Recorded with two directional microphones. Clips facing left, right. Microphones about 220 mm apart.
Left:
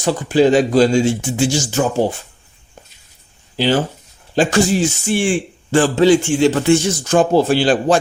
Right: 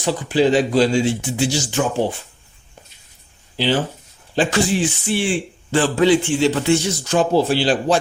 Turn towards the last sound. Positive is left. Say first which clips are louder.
# left 3 dB
turn(degrees=50)  # may be behind; listen again after turning